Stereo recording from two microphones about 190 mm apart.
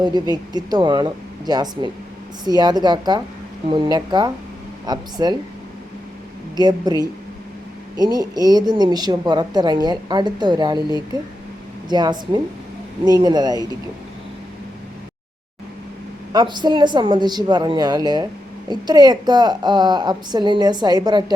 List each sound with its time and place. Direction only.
0.0 s a woman's voice: 20° right (ahead or behind)
6.6 s a woman's voice: 20° right (ahead or behind)
16.3 s a woman's voice: 20° right (ahead or behind)